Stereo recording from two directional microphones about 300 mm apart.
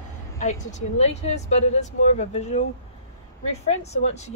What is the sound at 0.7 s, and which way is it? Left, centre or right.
Speech, left.